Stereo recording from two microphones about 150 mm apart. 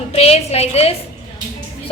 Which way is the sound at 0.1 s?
45° left (ahead or behind).